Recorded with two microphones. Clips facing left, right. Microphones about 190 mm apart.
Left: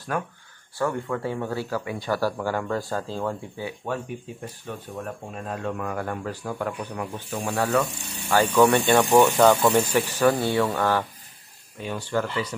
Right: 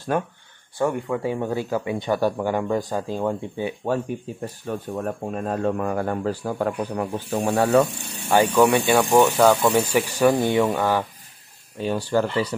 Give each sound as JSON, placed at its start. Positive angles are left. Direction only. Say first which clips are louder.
{"t": 0.7, "sound": "speech", "louder": "right 3 dB", "side_deg": -20}
{"t": 4.6, "sound": "speech", "louder": "right 7 dB", "side_deg": -45}
{"t": 7.3, "sound": "speech", "louder": "right 6 dB", "side_deg": -25}
{"t": 8.3, "sound": "speech", "louder": "right 2 dB", "side_deg": -15}
{"t": 11.8, "sound": "speech", "louder": "right 5 dB", "side_deg": -35}